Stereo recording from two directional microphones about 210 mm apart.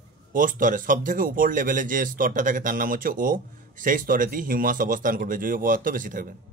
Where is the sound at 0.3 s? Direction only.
40° right (ahead or behind).